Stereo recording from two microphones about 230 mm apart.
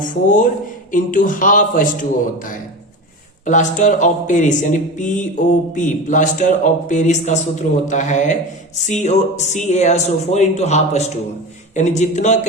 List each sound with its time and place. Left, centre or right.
0.0 s speech: left
3.4 s speech: left